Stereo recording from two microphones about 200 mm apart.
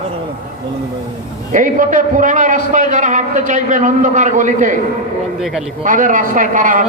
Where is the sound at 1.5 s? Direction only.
40° right (ahead or behind).